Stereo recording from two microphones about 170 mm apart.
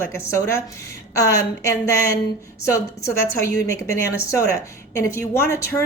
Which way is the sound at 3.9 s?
15° left (ahead or behind).